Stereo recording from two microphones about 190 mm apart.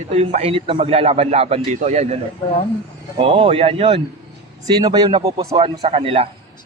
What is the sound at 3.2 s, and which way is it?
A man's voice, 30° right (ahead or behind).